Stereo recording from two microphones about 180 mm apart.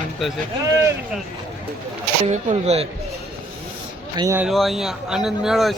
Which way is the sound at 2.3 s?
35° right (ahead or behind).